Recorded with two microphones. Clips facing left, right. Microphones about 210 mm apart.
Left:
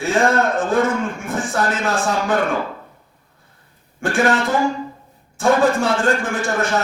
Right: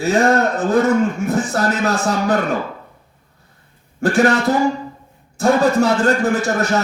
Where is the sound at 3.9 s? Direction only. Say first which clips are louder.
Right 3 dB; 40° right (ahead or behind).